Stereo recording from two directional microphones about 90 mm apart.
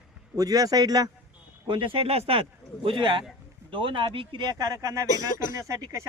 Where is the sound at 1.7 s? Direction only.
70° right (ahead or behind).